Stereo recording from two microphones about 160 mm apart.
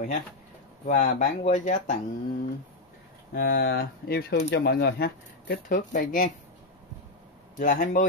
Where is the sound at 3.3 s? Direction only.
75° left (ahead or behind).